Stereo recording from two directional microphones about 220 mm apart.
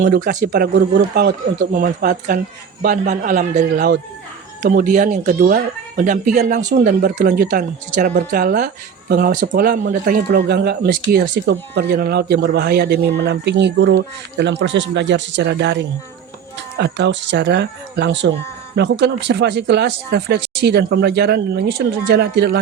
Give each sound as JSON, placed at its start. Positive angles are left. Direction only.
{"t": 0.0, "sound": "speech", "side_deg": -35}